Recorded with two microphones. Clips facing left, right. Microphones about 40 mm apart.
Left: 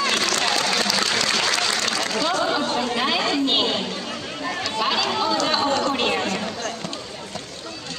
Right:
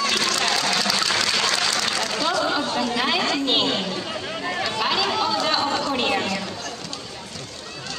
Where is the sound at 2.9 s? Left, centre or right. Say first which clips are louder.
Right 1 dB; centre.